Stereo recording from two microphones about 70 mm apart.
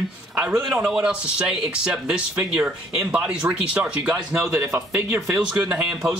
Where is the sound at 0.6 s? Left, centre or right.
Centre.